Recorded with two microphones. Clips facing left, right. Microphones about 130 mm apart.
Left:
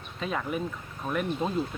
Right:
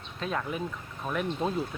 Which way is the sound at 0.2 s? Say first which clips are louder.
Left 1 dB; centre (ahead or behind).